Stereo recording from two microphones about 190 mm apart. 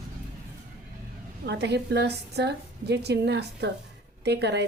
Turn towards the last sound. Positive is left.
turn(degrees=-60)  # may be behind; listen again after turning